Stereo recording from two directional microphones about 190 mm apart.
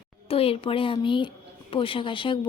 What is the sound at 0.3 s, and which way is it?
A woman's voice, 30° left (ahead or behind).